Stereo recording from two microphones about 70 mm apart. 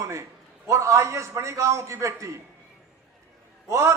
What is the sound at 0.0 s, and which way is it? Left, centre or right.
A man's voice, right.